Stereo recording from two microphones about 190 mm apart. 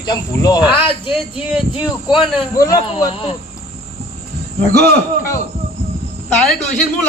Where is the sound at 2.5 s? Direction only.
20° left (ahead or behind).